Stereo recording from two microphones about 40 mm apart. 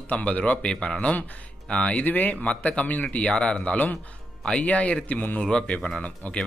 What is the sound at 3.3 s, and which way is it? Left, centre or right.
Speech, left.